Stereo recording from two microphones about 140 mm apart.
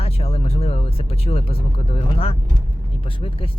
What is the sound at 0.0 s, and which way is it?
Speech, 45° left (ahead or behind).